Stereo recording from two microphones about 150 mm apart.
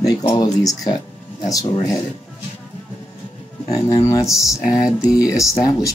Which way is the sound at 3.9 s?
20° left (ahead or behind).